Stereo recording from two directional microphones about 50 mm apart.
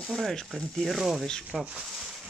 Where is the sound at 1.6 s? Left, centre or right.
Centre.